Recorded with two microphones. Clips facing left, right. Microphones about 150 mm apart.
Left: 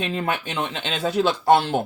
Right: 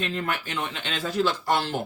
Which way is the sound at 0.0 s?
20° left (ahead or behind).